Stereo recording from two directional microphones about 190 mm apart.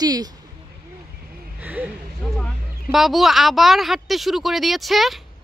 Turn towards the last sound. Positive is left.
turn(degrees=0)  # may be behind; listen again after turning